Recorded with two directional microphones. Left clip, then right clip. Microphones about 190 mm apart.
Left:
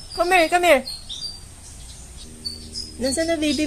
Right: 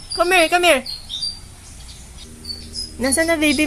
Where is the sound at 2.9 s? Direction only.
20° right (ahead or behind).